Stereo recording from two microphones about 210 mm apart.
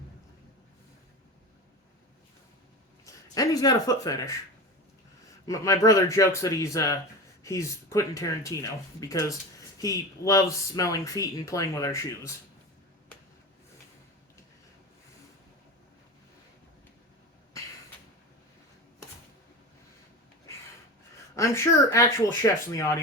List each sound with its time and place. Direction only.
3.3 s speech: 15° left (ahead or behind)
5.5 s speech: 15° left (ahead or behind)
21.3 s speech: 15° left (ahead or behind)